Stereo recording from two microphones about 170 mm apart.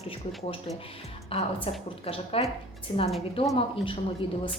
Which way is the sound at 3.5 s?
30° left (ahead or behind).